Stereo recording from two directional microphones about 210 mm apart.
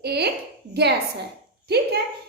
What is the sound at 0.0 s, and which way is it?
Speech, 50° right (ahead or behind).